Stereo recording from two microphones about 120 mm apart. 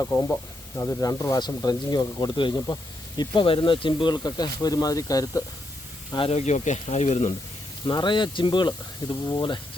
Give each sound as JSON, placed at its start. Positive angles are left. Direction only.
{"t": 0.1, "sound": "speech", "side_deg": 25}
{"t": 6.1, "sound": "speech", "side_deg": 50}
{"t": 6.4, "sound": "speech", "side_deg": 75}
{"t": 7.9, "sound": "speech", "side_deg": 40}